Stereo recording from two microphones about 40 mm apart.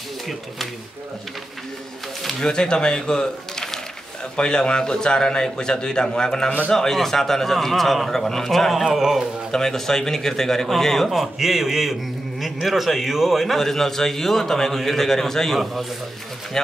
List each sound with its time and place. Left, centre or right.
2.5 s a man's voice: centre
8.8 s speech: centre
9.5 s a man's voice: centre
11.1 s a man's voice: centre